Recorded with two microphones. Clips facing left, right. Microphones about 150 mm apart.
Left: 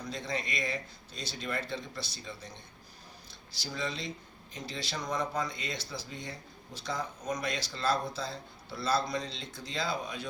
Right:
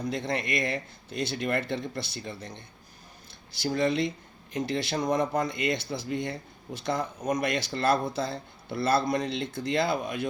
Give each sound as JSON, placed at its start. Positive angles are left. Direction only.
{"t": 0.0, "sound": "speech", "side_deg": -55}
{"t": 3.6, "sound": "speech", "side_deg": -55}